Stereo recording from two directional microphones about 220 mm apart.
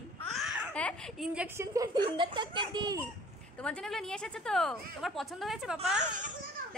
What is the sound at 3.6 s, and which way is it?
A woman's voice, 5° left (ahead or behind).